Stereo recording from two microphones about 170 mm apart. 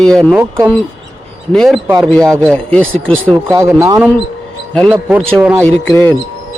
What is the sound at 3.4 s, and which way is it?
Speech, 15° right (ahead or behind).